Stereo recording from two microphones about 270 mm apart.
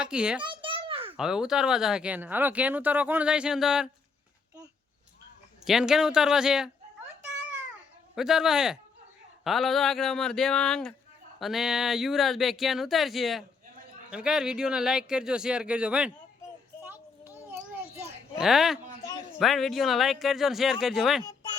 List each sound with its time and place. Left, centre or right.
0.0 s speech: centre
0.4 s a sound: centre
1.1 s speech: centre
5.6 s speech: centre
8.1 s speech: centre
16.8 s a sound: centre
19.4 s speech: centre